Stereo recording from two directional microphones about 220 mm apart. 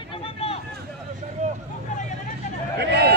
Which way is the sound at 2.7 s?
50° right (ahead or behind).